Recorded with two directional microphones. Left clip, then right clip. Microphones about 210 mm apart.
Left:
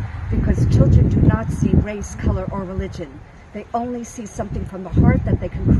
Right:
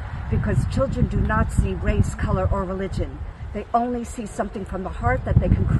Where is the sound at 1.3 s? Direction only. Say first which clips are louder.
Left 2 dB; 10° left (ahead or behind).